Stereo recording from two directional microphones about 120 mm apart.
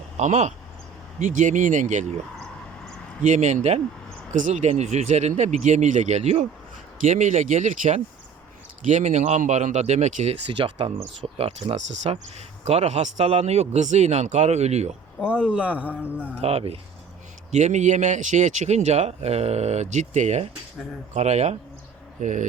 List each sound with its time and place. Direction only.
0.2 s speech: 80° right
1.2 s speech: 90° right
3.2 s speech: 80° right
4.3 s speech: 90° right; by 6.4 s 65° right (ahead or behind)
7.1 s speech: 90° right
10.6 s speech: 45° right (ahead or behind)
11.3 s speech: 60° right (ahead or behind)
15.2 s a man's voice: 10° right (ahead or behind)
16.4 s speech: 55° right (ahead or behind)
17.5 s speech: 75° right (ahead or behind)
22.2 s speech: 90° right